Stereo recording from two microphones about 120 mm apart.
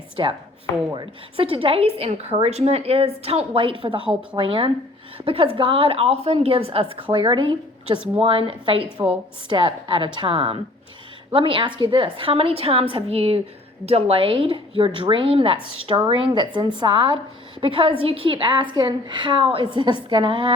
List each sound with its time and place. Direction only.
0.2 s a woman's voice: 40° right (ahead or behind)
6.9 s a woman's voice: 45° right (ahead or behind)